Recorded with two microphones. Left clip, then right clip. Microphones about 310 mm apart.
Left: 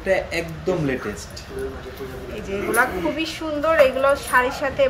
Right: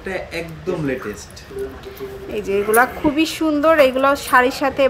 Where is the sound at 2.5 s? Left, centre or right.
Right.